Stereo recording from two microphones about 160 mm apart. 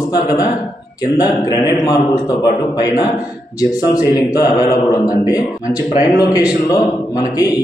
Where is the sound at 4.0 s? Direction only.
25° left (ahead or behind).